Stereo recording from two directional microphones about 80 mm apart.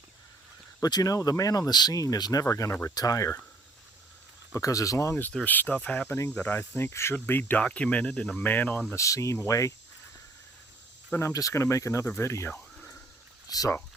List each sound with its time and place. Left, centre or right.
0.8 s speech: left
4.5 s speech: left
5.5 s speech: left
9.0 s speech: left
11.2 s speech: left
13.5 s speech: left